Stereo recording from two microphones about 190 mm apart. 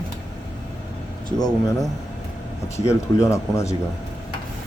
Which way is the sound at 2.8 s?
15° left (ahead or behind).